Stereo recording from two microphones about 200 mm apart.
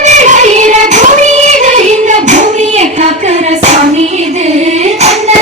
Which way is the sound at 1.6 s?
35° right (ahead or behind).